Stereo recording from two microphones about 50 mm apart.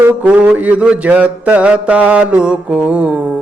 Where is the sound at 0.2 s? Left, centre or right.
Right.